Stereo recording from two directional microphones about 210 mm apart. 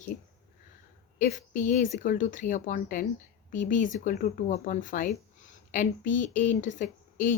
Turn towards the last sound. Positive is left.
turn(degrees=40)  # may be behind; listen again after turning